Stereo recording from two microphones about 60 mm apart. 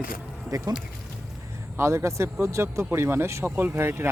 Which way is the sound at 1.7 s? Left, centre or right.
Right.